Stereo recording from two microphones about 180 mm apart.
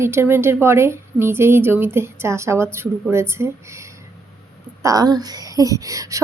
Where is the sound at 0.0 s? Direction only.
15° right (ahead or behind).